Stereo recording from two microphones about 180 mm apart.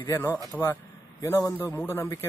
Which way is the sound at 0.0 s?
10° left (ahead or behind).